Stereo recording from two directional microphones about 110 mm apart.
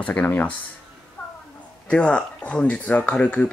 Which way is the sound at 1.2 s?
5° left (ahead or behind).